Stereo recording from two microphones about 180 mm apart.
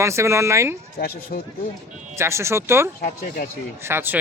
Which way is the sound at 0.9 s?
60° left (ahead or behind).